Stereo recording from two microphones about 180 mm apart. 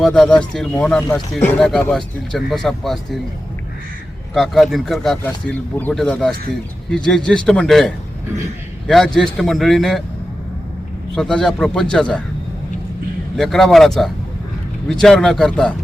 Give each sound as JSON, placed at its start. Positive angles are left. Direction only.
{"t": 0.0, "sound": "speech", "side_deg": 5}
{"t": 4.4, "sound": "speech", "side_deg": 0}
{"t": 11.1, "sound": "speech", "side_deg": 5}
{"t": 13.3, "sound": "speech", "side_deg": 0}